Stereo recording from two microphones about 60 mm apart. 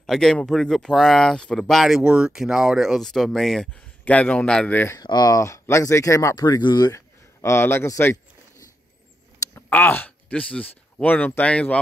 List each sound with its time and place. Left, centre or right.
0.0 s speech: centre
1.8 s speech: centre
2.0 s speech: centre
3.0 s speech: centre
4.0 s a man's voice: left
4.9 s speech: left
5.4 s speech: left
7.4 s speech: left
9.6 s speech: left
11.4 s a man's voice: centre